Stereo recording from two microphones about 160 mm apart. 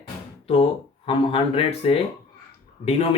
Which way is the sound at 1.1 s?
35° left (ahead or behind).